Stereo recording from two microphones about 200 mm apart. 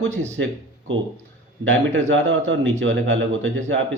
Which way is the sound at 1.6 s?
70° right (ahead or behind).